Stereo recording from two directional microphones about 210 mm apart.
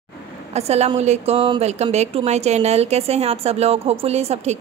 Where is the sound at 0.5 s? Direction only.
30° right (ahead or behind).